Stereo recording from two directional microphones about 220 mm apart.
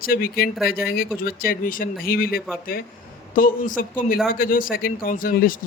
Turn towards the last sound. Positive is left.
turn(degrees=40)  # may be behind; listen again after turning